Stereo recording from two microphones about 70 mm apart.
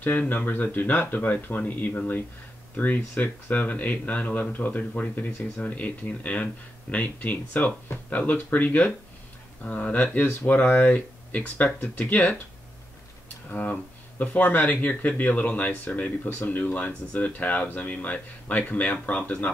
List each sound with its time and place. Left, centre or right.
0.0 s speech: left
13.5 s speech: centre